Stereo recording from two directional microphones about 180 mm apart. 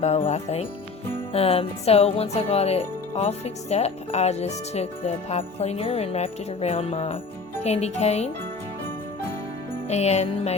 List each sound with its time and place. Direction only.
0.0 s speech: 35° left (ahead or behind)
9.9 s speech: 35° left (ahead or behind)